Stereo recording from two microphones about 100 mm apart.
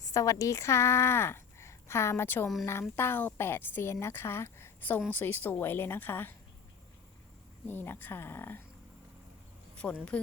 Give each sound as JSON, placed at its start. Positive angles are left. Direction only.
{"t": 0.0, "sound": "speech", "side_deg": 35}
{"t": 7.7, "sound": "speech", "side_deg": 20}
{"t": 9.7, "sound": "speech", "side_deg": 10}